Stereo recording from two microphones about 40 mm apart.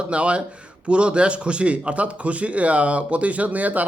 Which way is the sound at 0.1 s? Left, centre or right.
Right.